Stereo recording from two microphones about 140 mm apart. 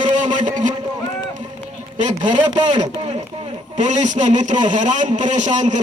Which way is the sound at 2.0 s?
60° right (ahead or behind).